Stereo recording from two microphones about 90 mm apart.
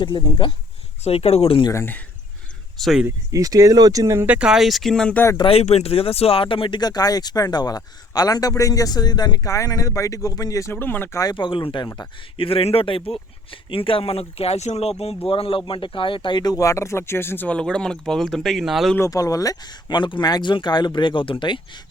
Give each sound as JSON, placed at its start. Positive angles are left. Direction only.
{"t": 0.0, "sound": "speech", "side_deg": 60}
{"t": 1.1, "sound": "speech", "side_deg": 90}
{"t": 1.7, "sound": "speech", "side_deg": 25}
{"t": 2.7, "sound": "speech", "side_deg": 0}
{"t": 3.3, "sound": "speech", "side_deg": -40}
{"t": 4.3, "sound": "speech", "side_deg": -10}
{"t": 5.4, "sound": "speech", "side_deg": 90}
{"t": 6.7, "sound": "a man's voice", "side_deg": 50}
{"t": 10.7, "sound": "speech", "side_deg": 25}
{"t": 11.3, "sound": "speech", "side_deg": 65}
{"t": 12.4, "sound": "speech", "side_deg": 90}
{"t": 18.9, "sound": "a man's voice", "side_deg": 35}
{"t": 19.9, "sound": "speech", "side_deg": 60}